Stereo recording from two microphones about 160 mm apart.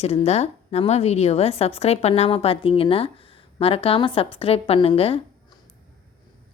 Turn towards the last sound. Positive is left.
turn(degrees=35)  # may be behind; listen again after turning